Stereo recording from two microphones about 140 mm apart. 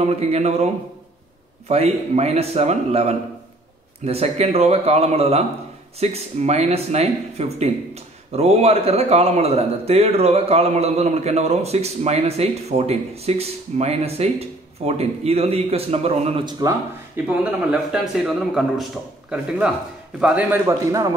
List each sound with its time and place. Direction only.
0.0 s speech: 50° right (ahead or behind)
1.7 s speech: 50° right (ahead or behind)
17.3 s speech: 5° right (ahead or behind)
20.2 s a man's voice: 10° right (ahead or behind)